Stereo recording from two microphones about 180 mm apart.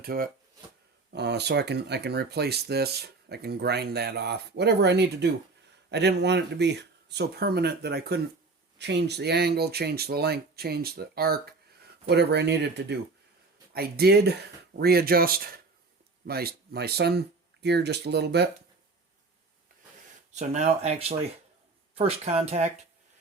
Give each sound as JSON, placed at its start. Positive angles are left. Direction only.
{"t": 0.0, "sound": "speech", "side_deg": -55}
{"t": 1.1, "sound": "speech", "side_deg": -65}
{"t": 12.0, "sound": "speech", "side_deg": -65}
{"t": 13.7, "sound": "speech", "side_deg": -60}
{"t": 20.3, "sound": "speech", "side_deg": -40}